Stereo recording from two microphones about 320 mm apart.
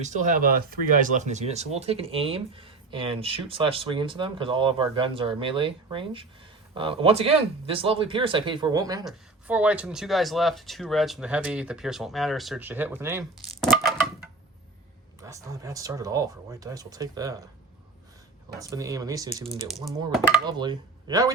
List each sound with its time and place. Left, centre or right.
0.0 s speech: right; by 13.2 s centre
15.2 s speech: centre
18.7 s speech: centre
20.4 s speech: centre